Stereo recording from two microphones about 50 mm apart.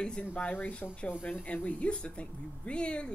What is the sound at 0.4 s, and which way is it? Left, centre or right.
Speech, left.